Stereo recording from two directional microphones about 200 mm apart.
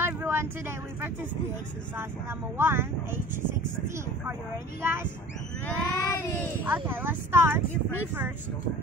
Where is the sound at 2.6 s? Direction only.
10° right (ahead or behind).